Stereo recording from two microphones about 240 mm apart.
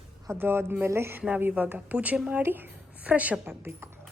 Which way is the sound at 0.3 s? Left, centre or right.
Centre.